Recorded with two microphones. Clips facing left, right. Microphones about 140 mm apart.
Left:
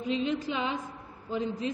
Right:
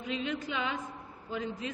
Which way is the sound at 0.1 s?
30° left (ahead or behind).